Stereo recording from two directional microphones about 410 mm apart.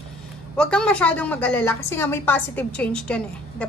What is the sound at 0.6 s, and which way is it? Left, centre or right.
A woman's voice, centre.